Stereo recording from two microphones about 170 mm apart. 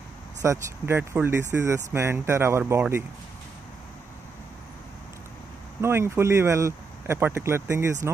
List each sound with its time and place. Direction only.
0.4 s speech: 15° right (ahead or behind)
5.8 s speech: 15° right (ahead or behind)